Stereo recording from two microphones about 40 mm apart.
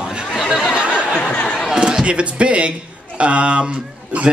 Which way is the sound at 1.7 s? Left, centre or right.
Centre.